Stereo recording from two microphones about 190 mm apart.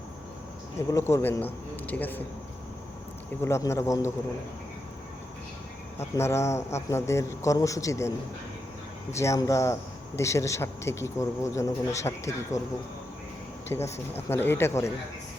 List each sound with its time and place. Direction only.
0.9 s speech: 15° left (ahead or behind)
1.7 s a sound: 10° left (ahead or behind)
3.4 s speech: 15° left (ahead or behind)
6.0 s speech: 15° left (ahead or behind)
9.1 s speech: 15° left (ahead or behind)